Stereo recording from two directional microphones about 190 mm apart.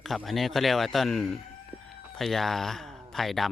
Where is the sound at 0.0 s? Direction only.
Centre (ahead or behind).